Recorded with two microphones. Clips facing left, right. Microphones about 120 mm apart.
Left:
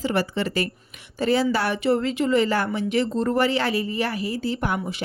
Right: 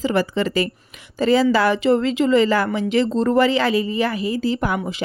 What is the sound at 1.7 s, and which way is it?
Speech, 90° right.